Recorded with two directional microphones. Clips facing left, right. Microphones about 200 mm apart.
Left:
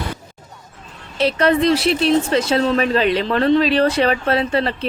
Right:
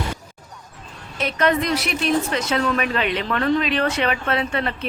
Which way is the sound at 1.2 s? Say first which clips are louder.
Left 5 dB; 30° left (ahead or behind).